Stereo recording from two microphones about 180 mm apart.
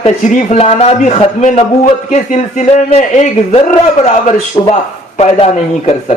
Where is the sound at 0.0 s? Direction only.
35° left (ahead or behind).